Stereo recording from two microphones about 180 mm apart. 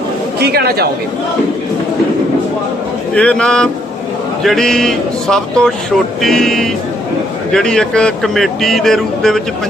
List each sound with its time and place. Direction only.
0.3 s speech: 60° right (ahead or behind)
3.2 s speech: 5° left (ahead or behind)